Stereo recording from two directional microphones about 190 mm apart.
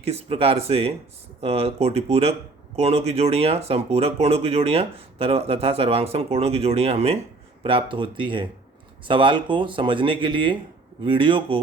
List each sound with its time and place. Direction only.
0.0 s speech: 30° right (ahead or behind)